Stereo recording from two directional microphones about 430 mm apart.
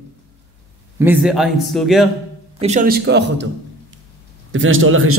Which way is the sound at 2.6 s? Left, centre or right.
Centre.